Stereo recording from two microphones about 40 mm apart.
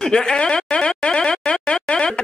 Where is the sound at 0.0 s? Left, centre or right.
Centre.